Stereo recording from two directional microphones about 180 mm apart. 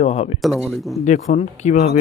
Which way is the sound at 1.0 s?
40° left (ahead or behind).